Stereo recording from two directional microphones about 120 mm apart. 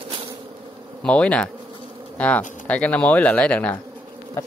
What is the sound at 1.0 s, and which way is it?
Speech, 10° left (ahead or behind).